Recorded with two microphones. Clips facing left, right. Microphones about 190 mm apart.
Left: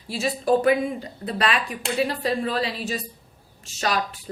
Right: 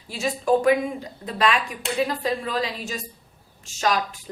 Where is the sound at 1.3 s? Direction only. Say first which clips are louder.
Right 2 dB; 35° left (ahead or behind).